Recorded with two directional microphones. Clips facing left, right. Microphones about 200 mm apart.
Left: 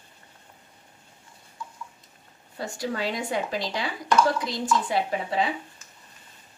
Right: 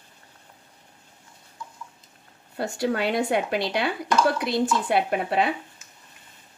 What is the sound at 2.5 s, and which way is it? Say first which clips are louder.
Speech: right 5 dB; 65° right (ahead or behind).